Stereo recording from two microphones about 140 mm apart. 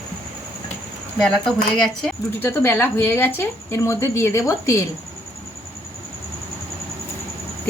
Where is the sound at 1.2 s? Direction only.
5° left (ahead or behind).